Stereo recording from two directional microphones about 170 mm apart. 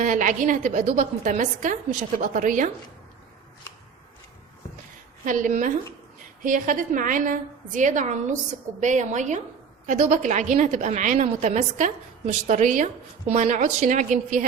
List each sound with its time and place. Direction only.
0.0 s a woman's voice: 50° right (ahead or behind)
5.2 s a woman's voice: 50° right (ahead or behind)